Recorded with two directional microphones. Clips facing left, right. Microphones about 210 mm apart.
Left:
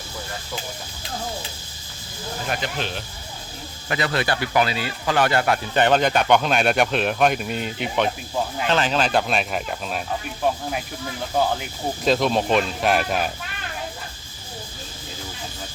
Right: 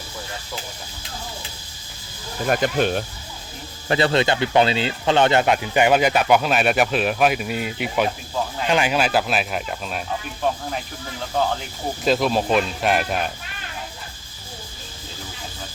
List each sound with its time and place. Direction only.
2.5 s speech: 50° right (ahead or behind)
3.8 s speech: 30° right (ahead or behind)
5.8 s speech: 10° right (ahead or behind)
12.0 s speech: centre (ahead or behind)